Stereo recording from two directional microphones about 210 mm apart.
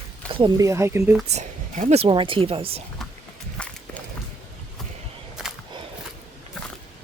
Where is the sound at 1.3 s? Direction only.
35° right (ahead or behind).